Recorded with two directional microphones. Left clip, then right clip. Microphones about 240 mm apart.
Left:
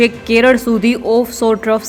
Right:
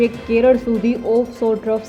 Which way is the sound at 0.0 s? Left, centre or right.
Centre.